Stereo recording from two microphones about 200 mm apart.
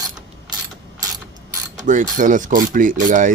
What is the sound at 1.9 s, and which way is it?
Mechanisms, 40° right (ahead or behind).